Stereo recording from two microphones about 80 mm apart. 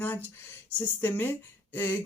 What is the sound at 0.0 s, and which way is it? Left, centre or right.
Speech, left.